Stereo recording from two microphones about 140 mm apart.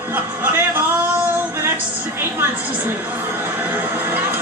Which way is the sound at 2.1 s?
15° right (ahead or behind).